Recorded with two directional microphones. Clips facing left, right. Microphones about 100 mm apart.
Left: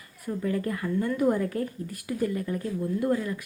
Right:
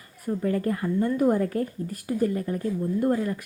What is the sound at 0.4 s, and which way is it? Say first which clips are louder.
A woman's voice: right 3 dB; 40° right (ahead or behind).